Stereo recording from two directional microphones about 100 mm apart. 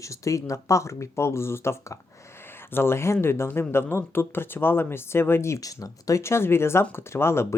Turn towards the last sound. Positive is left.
turn(degrees=25)  # may be behind; listen again after turning